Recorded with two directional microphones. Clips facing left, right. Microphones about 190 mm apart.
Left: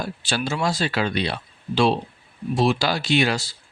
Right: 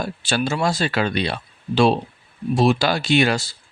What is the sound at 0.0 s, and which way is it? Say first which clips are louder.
Speech: right 3 dB; 50° right (ahead or behind).